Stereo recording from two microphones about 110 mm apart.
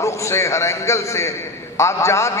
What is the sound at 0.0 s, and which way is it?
A man's voice, 25° left (ahead or behind).